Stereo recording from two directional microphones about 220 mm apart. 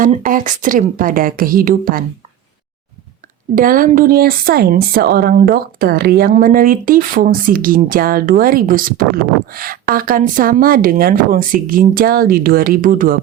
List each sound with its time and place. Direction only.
0.0 s a woman's voice: 40° right (ahead or behind)
3.5 s a woman's voice: 40° right (ahead or behind)